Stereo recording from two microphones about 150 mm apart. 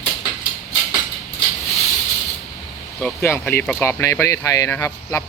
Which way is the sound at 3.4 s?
10° left (ahead or behind).